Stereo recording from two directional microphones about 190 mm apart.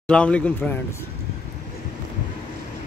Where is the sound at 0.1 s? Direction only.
5° left (ahead or behind).